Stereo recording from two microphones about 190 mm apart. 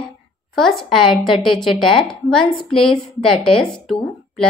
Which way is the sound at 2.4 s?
25° left (ahead or behind).